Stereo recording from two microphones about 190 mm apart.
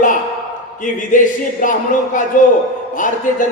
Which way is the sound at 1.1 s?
45° left (ahead or behind).